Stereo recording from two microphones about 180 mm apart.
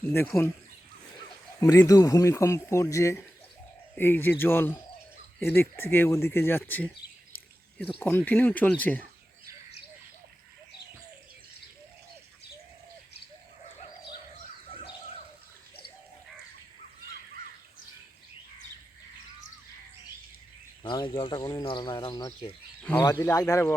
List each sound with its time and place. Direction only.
0.3 s speech: 15° left (ahead or behind)
1.6 s speech: 15° left (ahead or behind)
7.9 s speech: 10° left (ahead or behind)
20.8 s speech: 25° left (ahead or behind)
22.8 s speech: 10° left (ahead or behind)